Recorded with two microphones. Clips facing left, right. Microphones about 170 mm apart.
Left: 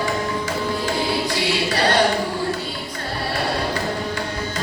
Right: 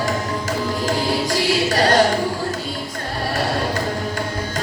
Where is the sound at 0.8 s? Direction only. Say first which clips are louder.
Right 2 dB; 40° right (ahead or behind).